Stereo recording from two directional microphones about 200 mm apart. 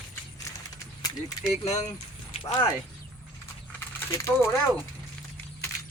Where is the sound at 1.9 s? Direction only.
30° left (ahead or behind).